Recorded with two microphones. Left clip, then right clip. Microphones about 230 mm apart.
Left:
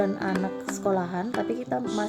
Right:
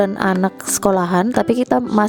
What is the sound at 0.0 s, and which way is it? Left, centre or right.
Speech, right.